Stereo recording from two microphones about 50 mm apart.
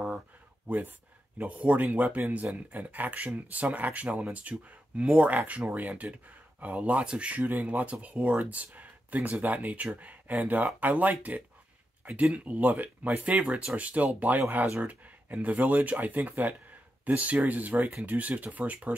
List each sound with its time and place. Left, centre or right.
0.7 s speech: right